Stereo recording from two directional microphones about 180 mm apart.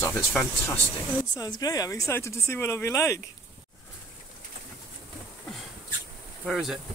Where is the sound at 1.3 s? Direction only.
20° left (ahead or behind).